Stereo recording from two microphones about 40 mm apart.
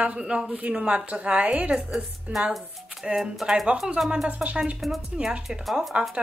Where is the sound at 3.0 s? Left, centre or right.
Centre.